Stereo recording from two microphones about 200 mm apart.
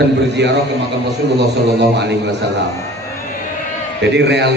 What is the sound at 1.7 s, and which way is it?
Speech, 60° right (ahead or behind).